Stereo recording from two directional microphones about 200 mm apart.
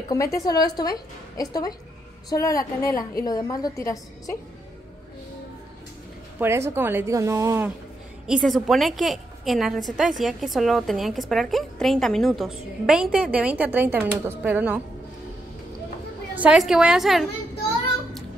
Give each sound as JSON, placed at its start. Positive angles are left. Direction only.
{"t": 0.1, "sound": "a woman's voice", "side_deg": 15}
{"t": 6.7, "sound": "a woman's voice", "side_deg": -10}
{"t": 8.3, "sound": "a woman's voice", "side_deg": 0}
{"t": 16.3, "sound": "a woman's voice", "side_deg": -5}